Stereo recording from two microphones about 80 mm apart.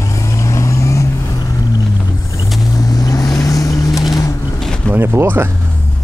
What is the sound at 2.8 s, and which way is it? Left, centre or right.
Vehicle, left.